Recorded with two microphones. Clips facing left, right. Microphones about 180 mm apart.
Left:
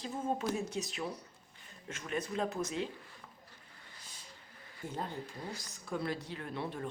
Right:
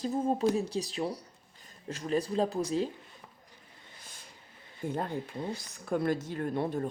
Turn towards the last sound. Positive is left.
turn(degrees=-45)  # may be behind; listen again after turning